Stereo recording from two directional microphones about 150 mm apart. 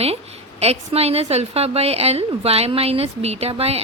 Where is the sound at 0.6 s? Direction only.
45° right (ahead or behind).